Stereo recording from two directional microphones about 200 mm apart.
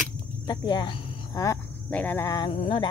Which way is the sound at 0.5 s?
20° left (ahead or behind).